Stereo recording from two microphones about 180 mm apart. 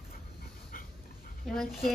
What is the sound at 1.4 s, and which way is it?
Speech, centre (ahead or behind).